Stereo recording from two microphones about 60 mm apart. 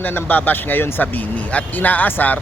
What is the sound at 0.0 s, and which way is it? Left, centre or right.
Speech, left.